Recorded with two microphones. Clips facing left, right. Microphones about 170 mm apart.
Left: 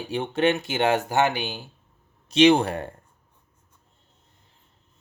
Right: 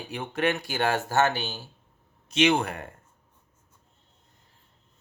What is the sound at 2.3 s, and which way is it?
Speech, 35° left (ahead or behind).